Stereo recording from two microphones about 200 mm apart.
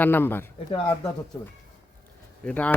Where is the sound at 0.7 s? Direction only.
25° left (ahead or behind).